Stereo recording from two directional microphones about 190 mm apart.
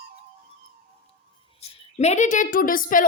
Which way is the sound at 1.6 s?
35° left (ahead or behind).